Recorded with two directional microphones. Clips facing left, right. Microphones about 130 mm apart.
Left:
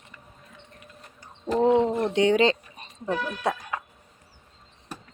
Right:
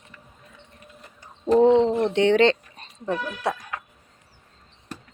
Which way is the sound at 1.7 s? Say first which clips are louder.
Right 3 dB; 10° left (ahead or behind).